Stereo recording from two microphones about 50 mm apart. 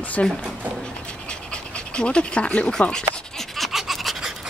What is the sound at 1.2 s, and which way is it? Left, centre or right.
Pant, left.